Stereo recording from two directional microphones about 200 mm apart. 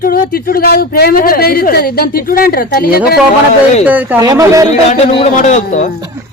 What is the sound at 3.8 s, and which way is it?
Speech, 10° right (ahead or behind).